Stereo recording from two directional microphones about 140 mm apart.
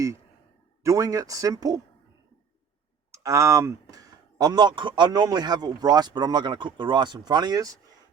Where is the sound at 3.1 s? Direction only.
20° right (ahead or behind).